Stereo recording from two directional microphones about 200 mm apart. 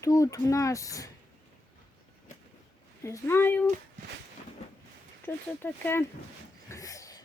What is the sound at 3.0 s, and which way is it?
Speech, 15° left (ahead or behind).